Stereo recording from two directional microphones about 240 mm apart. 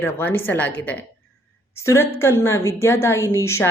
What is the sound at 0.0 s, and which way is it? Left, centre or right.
A woman's voice, centre.